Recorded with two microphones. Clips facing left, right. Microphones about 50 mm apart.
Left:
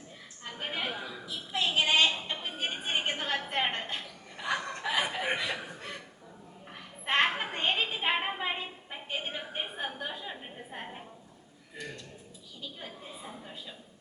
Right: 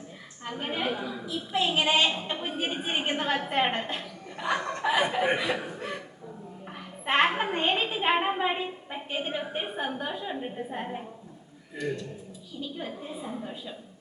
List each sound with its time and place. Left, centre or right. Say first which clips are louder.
0.6 s a woman's voice: right 5 dB; centre
7.0 s a sound: right 4 dB; centre
8.3 s a woman's voice: right 6 dB; centre
12.5 s a woman's voice: right 8 dB; centre